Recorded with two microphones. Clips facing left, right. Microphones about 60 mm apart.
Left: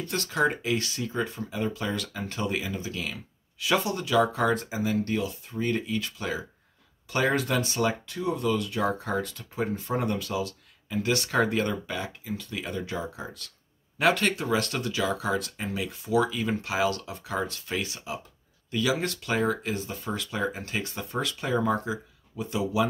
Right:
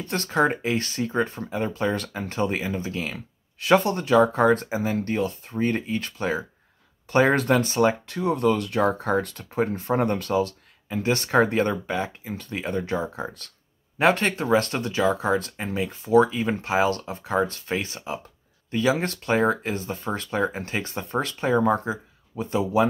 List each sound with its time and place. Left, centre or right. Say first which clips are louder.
0.0 s speech: right 3 dB; right
8.2 s speech: right 5 dB; right